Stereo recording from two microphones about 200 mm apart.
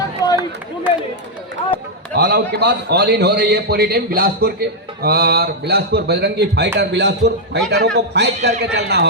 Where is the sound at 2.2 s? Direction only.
55° right (ahead or behind).